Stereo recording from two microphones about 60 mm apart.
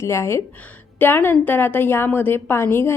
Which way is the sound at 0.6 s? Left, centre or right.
Left.